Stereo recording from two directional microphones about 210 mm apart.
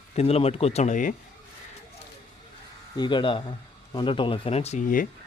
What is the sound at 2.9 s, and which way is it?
Speech, 20° left (ahead or behind).